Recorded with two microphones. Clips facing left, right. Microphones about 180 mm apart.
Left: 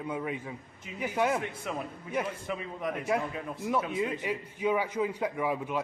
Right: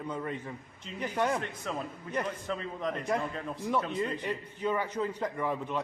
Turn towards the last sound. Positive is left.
turn(degrees=10)  # may be behind; listen again after turning